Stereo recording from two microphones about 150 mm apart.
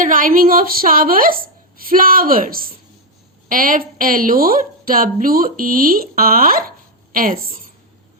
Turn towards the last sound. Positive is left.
turn(degrees=-70)  # may be behind; listen again after turning